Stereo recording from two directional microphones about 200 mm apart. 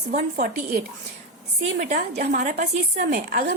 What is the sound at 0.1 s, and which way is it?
Speech, 45° right (ahead or behind).